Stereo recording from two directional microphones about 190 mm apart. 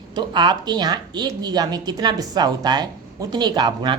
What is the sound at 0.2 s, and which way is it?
A woman's voice, 25° right (ahead or behind).